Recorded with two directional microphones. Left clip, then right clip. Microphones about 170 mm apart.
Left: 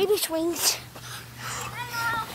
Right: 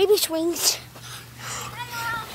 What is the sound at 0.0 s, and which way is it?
Speech, 40° right (ahead or behind).